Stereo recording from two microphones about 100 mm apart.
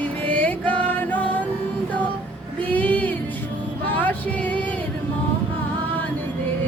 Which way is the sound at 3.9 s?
15° left (ahead or behind).